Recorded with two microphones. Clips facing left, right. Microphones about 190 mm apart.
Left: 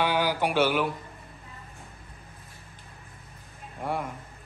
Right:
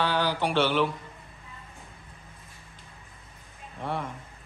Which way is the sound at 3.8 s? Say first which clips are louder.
Left 1 dB; 10° left (ahead or behind).